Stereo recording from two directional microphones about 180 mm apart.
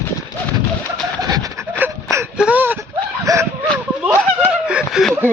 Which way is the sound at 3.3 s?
20° right (ahead or behind).